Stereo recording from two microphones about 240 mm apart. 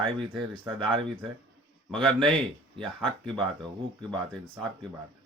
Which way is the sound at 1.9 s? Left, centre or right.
Centre.